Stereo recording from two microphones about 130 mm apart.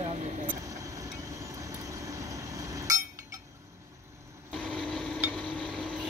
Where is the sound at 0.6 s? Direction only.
25° right (ahead or behind).